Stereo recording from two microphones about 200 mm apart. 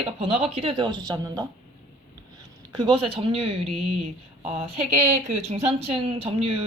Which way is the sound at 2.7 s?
25° right (ahead or behind).